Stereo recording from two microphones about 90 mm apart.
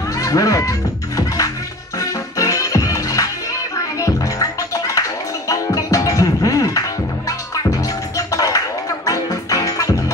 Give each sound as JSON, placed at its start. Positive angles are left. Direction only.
{"t": 0.2, "sound": "music", "side_deg": 40}